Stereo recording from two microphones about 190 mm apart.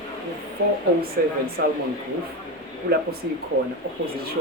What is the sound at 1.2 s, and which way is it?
Speech, 50° right (ahead or behind).